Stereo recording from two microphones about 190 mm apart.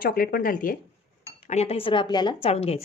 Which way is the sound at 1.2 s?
35° left (ahead or behind).